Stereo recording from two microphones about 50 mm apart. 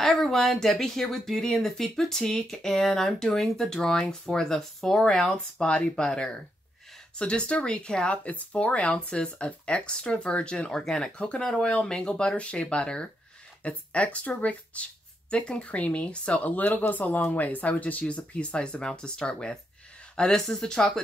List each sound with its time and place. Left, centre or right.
0.0 s speech: centre; by 10.7 s left
10.7 s speech: centre
11.1 s speech: left
20.2 s speech: centre